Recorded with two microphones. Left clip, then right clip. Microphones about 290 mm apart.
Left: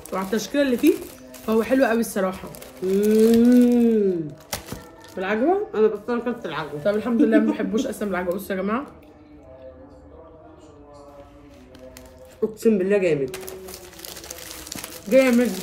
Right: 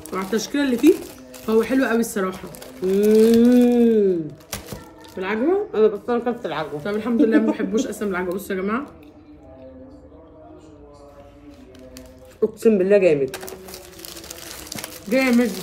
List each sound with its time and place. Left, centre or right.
0.1 s speech: centre
4.5 s a sound: centre
5.1 s speech: centre
6.8 s speech: centre
12.4 s speech: centre
15.0 s speech: centre